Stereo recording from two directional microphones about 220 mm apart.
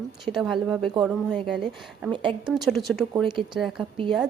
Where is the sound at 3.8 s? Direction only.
20° right (ahead or behind).